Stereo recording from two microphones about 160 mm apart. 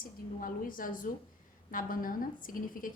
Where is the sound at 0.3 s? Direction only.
60° left (ahead or behind).